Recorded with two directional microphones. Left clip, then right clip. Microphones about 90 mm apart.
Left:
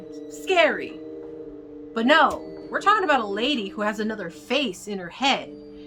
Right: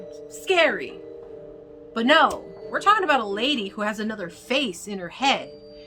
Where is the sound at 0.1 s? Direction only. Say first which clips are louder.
Even; 30° right (ahead or behind).